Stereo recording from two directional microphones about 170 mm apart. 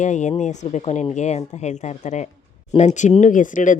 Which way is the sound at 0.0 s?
45° left (ahead or behind).